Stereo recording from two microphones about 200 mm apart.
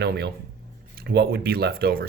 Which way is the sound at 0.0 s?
55° right (ahead or behind).